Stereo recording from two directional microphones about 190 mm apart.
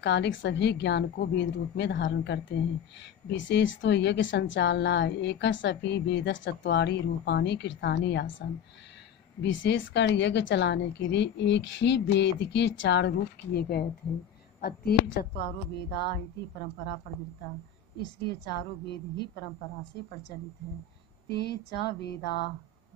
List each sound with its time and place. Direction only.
0.0 s a woman's voice: 65° left (ahead or behind)
17.9 s a woman's voice: 60° left (ahead or behind)
21.3 s a woman's voice: 60° left (ahead or behind)